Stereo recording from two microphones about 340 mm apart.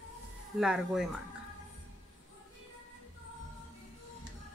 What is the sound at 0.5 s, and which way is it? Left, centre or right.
Speech, centre.